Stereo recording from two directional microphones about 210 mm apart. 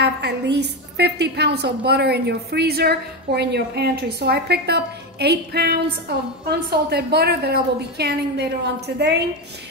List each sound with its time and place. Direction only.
0.0 s a woman's voice: 55° right (ahead or behind)